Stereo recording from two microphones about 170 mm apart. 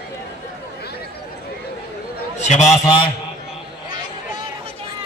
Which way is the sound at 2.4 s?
40° left (ahead or behind).